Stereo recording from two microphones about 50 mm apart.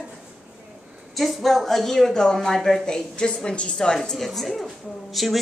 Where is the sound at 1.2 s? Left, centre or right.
Centre.